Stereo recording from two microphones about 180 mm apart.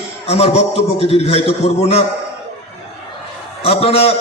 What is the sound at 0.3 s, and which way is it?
A man's voice, 35° left (ahead or behind).